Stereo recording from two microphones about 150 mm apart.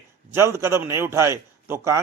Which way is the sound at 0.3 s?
20° right (ahead or behind).